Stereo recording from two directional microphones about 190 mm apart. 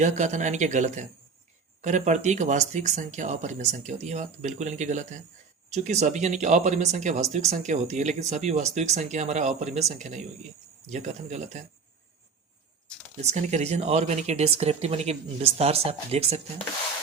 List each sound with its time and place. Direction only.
0.0 s speech: 40° right (ahead or behind)
13.2 s speech: 35° right (ahead or behind)